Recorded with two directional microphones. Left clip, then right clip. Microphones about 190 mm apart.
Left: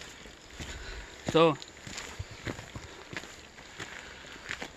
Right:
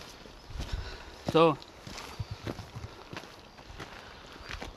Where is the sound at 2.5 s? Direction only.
20° left (ahead or behind).